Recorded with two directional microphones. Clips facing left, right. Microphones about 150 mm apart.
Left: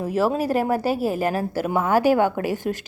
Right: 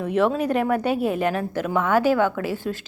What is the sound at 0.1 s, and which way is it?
Speech, 5° left (ahead or behind).